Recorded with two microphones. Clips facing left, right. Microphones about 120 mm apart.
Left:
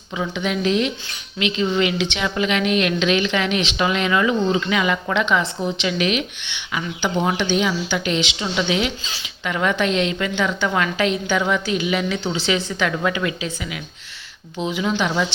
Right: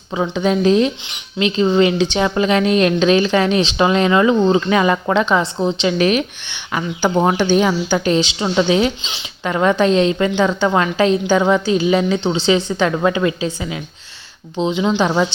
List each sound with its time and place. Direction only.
0.2 s a woman's voice: 35° right (ahead or behind)